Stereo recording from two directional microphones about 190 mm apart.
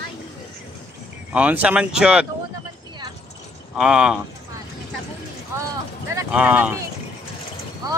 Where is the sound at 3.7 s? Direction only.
5° right (ahead or behind).